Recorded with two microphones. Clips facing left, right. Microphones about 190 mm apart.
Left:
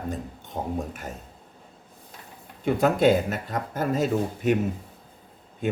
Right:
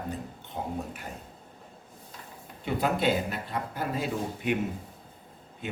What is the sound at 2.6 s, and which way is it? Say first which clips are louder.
Speech: left 7 dB; 45° left (ahead or behind).